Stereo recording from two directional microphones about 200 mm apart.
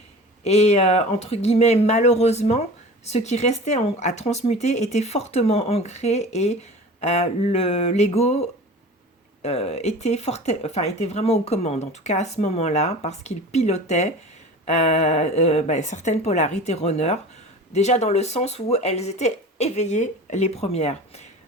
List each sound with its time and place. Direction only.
0.4 s speech: 35° left (ahead or behind)